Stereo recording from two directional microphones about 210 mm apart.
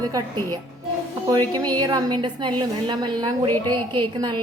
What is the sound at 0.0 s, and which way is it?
A woman's voice, 20° right (ahead or behind).